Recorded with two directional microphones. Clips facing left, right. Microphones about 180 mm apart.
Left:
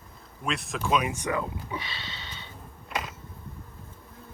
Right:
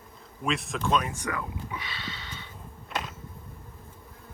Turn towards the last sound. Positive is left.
turn(degrees=0)  # may be behind; listen again after turning